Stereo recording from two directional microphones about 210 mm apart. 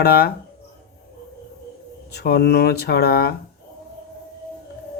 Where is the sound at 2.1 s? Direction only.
50° left (ahead or behind).